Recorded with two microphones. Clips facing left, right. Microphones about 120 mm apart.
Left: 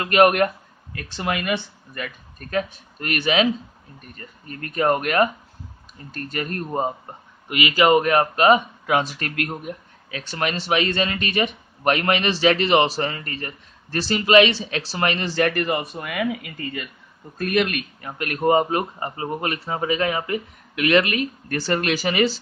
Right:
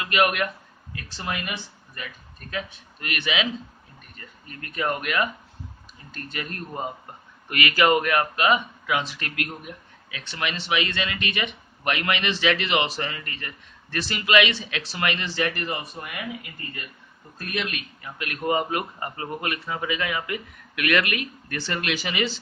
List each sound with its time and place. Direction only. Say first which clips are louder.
0.0 s speech: left 7 dB; 45° left (ahead or behind)
0.9 s speech: left 6 dB; 60° left (ahead or behind); by 6.9 s 45° left (ahead or behind)
7.4 s speech: left 3 dB; 20° left (ahead or behind); by 16.3 s 75° left (ahead or behind)
17.4 s speech: left 9 dB; 55° left (ahead or behind); by 22.4 s 40° left (ahead or behind)